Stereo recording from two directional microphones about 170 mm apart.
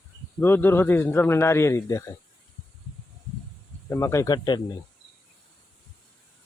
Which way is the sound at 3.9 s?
15° left (ahead or behind).